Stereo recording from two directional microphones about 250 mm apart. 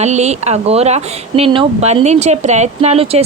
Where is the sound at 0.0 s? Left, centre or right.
Right.